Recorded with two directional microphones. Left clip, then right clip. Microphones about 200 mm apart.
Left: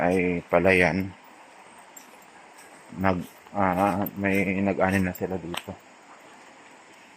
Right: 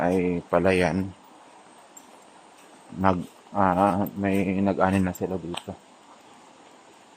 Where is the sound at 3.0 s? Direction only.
15° right (ahead or behind).